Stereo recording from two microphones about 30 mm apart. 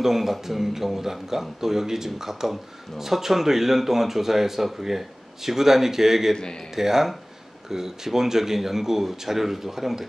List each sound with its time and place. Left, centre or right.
0.0 s speech: centre
6.3 s a man's voice: left
6.7 s speech: centre